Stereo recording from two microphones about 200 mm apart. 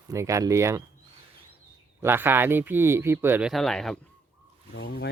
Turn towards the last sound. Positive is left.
turn(degrees=55)  # may be behind; listen again after turning